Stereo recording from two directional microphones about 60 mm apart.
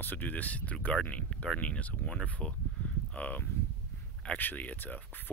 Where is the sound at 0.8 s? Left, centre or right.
Left.